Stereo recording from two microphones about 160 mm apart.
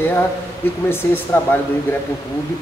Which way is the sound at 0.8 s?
15° left (ahead or behind).